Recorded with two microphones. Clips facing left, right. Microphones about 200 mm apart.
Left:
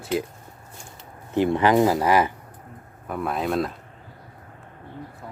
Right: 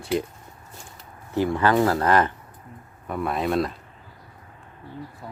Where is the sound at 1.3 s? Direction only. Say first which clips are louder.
Left 2 dB; 20° left (ahead or behind); by 3.7 s centre (ahead or behind).